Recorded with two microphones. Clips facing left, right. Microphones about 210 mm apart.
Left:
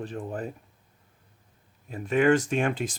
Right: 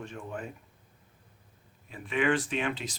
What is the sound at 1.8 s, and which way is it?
Speech, 45° left (ahead or behind).